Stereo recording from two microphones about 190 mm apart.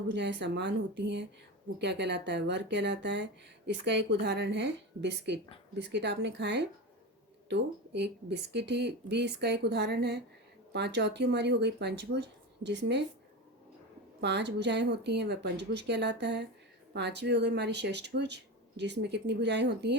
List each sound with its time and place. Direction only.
0.1 s a woman's voice: 65° right (ahead or behind)
14.2 s speech: 65° right (ahead or behind)